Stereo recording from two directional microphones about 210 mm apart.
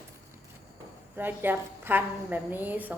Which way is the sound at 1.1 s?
10° right (ahead or behind).